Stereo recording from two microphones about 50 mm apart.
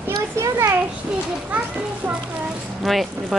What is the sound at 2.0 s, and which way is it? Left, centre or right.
Music, right.